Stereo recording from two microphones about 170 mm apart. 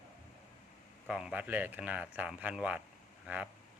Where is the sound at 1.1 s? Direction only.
5° right (ahead or behind).